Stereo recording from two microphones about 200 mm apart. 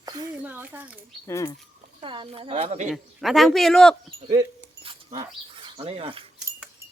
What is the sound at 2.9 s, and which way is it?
Speech, centre (ahead or behind).